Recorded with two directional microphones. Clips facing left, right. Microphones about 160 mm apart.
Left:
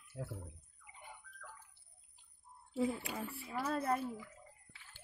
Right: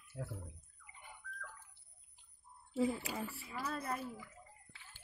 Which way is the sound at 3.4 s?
30° left (ahead or behind).